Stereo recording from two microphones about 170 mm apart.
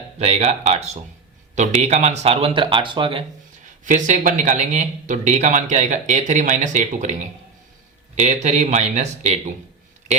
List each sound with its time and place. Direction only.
0.2 s speech: 40° right (ahead or behind)
3.8 s speech: 45° right (ahead or behind)